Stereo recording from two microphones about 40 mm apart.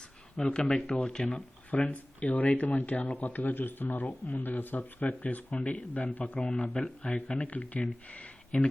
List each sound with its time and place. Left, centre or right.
0.3 s speech: left
1.3 s speech: left